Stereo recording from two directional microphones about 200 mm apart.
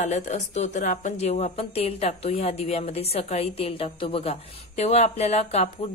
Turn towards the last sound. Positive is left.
turn(degrees=35)  # may be behind; listen again after turning